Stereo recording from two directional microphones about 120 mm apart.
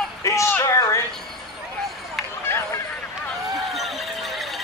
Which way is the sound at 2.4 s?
20° left (ahead or behind).